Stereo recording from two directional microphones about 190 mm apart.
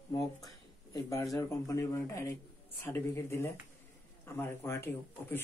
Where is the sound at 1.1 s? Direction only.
15° left (ahead or behind).